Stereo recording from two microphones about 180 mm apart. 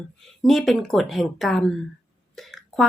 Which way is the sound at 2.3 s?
Centre (ahead or behind).